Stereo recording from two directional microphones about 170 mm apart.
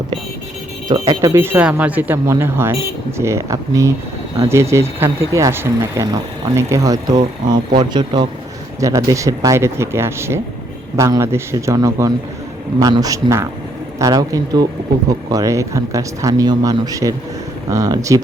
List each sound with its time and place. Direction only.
0.9 s speech: 20° right (ahead or behind)